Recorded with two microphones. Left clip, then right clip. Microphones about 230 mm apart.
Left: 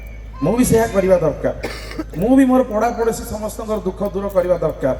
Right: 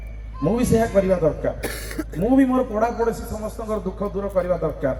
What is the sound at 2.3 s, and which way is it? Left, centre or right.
Speech, left.